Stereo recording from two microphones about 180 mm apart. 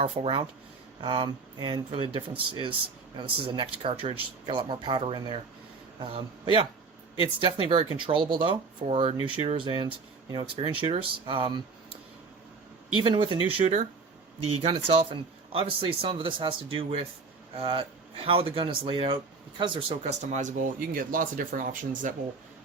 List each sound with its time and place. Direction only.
0.0 s speech: 35° right (ahead or behind)
13.0 s speech: 30° right (ahead or behind)
14.6 s speech: 35° right (ahead or behind)